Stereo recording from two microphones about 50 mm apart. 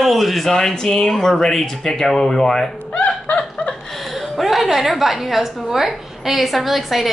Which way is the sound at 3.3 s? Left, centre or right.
Left.